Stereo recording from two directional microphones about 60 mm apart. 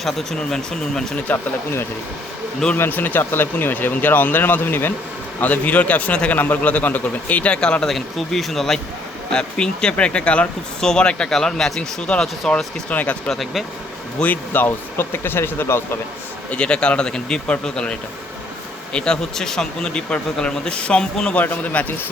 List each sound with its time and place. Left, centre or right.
0.0 s speech: centre
1.3 s a man's voice: left
2.7 s a man's voice: left; by 12.3 s centre
12.9 s a man's voice: left
13.3 s speech: centre
14.2 s speech: left
16.5 s speech: centre
18.9 s speech: centre
21.4 s a man's voice: left